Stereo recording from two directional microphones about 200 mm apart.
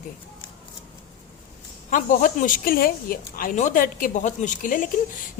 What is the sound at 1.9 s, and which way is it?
A woman's voice, 40° left (ahead or behind).